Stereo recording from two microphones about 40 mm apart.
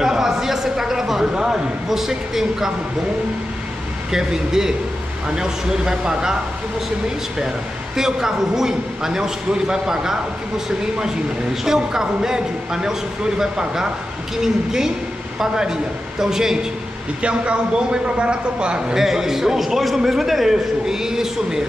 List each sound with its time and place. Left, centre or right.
0.0 s a sound: centre
1.2 s a man's voice: right
1.9 s a man's voice: centre
4.1 s a man's voice: centre
11.6 s a man's voice: centre
17.2 s a man's voice: right
18.9 s a man's voice: centre